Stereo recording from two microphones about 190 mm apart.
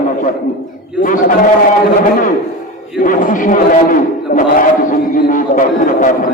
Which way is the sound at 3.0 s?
45° left (ahead or behind).